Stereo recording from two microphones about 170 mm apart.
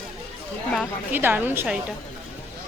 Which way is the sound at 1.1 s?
10° right (ahead or behind).